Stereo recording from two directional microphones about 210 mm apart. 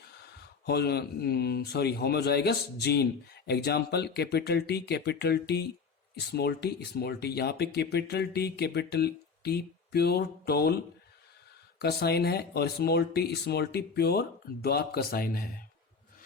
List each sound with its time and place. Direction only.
0.3 s speech: 50° left (ahead or behind)
11.8 s speech: 50° left (ahead or behind)